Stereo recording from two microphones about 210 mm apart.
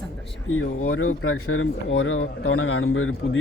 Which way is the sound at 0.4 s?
75° left (ahead or behind).